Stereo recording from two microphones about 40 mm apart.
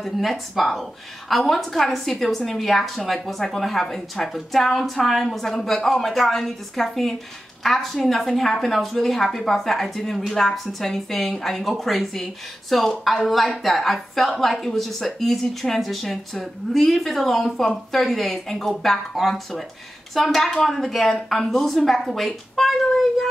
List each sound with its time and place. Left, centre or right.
0.0 s a woman's voice: centre